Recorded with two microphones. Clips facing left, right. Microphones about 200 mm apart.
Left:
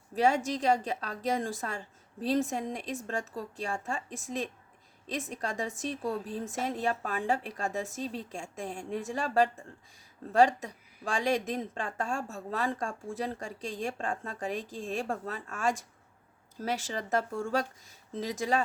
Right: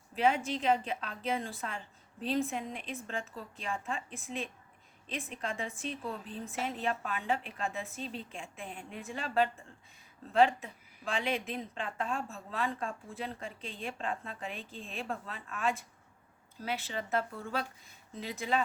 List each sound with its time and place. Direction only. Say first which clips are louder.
0.1 s speech: left 3 dB; 40° left (ahead or behind)